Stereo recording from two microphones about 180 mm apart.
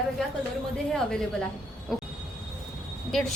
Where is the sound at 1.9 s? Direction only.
Centre (ahead or behind).